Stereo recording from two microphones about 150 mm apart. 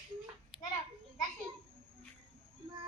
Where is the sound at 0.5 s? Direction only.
5° right (ahead or behind).